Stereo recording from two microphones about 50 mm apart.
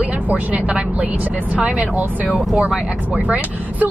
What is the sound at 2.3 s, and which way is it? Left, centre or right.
Speech, centre.